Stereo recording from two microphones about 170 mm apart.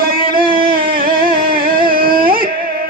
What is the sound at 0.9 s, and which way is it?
Carnatic music, 55° right (ahead or behind).